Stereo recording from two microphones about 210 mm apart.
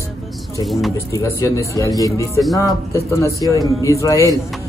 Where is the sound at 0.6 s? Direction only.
Centre (ahead or behind).